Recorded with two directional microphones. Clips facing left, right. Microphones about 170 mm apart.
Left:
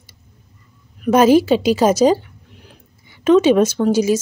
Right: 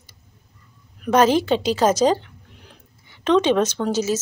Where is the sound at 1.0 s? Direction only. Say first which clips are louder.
Left 5 dB; 10° left (ahead or behind).